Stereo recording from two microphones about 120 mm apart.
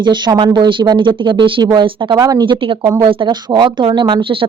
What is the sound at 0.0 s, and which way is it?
Speech, 40° right (ahead or behind).